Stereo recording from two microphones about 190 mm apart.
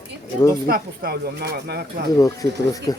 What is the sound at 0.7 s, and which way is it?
Speech, 55° right (ahead or behind).